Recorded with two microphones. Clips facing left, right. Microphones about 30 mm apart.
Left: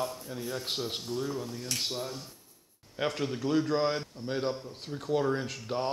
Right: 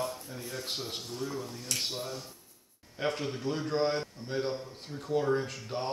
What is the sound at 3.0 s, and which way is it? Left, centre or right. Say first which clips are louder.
Speech: left 1 dB; left.